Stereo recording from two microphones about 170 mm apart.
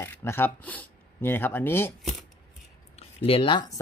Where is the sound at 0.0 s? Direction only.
15° left (ahead or behind).